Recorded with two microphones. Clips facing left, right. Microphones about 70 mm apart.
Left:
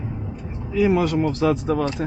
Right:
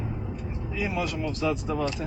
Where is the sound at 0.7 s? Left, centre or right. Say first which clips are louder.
Left 11 dB; left.